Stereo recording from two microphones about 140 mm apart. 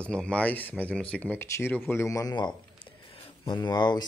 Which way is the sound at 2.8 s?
40° left (ahead or behind).